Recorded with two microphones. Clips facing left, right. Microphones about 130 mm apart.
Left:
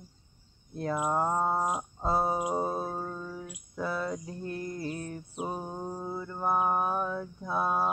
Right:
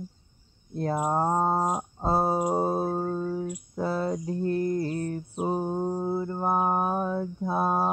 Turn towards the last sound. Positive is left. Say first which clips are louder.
# right 3 dB
turn(degrees=-35)  # may be behind; listen again after turning